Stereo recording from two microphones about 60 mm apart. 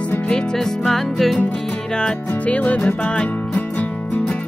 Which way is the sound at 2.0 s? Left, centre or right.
Centre.